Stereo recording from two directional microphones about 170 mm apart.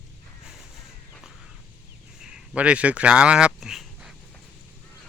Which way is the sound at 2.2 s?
5° right (ahead or behind).